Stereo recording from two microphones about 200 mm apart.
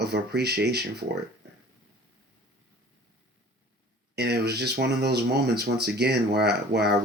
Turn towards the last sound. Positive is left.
turn(degrees=-55)  # may be behind; listen again after turning